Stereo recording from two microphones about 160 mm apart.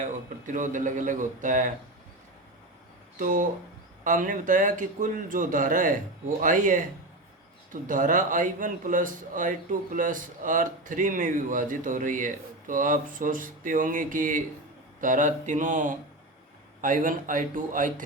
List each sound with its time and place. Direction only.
0.0 s a man's voice: 50° right (ahead or behind)
3.2 s a man's voice: 55° right (ahead or behind)